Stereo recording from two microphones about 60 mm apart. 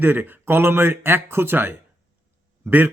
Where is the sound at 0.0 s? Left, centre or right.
Right.